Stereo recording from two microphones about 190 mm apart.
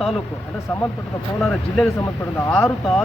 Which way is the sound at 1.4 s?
Centre (ahead or behind).